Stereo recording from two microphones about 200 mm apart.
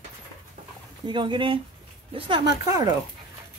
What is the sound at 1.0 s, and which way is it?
Speech, 25° right (ahead or behind).